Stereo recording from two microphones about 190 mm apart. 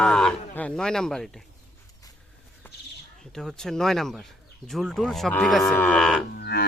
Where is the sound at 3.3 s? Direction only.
5° left (ahead or behind).